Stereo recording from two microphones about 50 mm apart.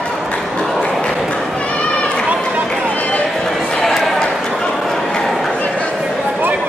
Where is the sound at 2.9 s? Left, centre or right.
Left.